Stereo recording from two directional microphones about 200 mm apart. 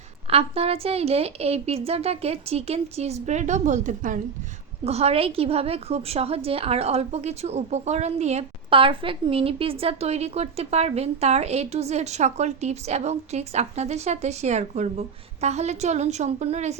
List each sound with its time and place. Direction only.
0.3 s a woman's voice: 30° right (ahead or behind)